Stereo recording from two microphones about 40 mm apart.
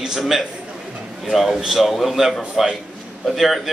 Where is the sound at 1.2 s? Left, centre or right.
Centre.